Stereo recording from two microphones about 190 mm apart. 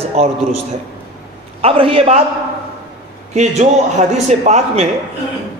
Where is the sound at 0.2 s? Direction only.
35° right (ahead or behind).